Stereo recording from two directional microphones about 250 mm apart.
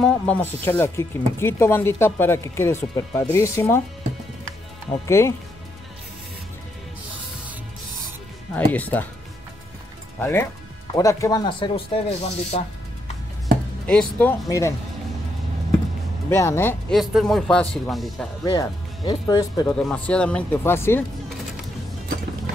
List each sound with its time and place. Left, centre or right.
0.0 s speech: centre
5.0 s speech: centre
8.5 s speech: centre
10.1 s speech: centre; by 12.6 s left
13.8 s speech: centre
16.3 s speech: centre
18.4 s speech: centre
19.8 s speech: centre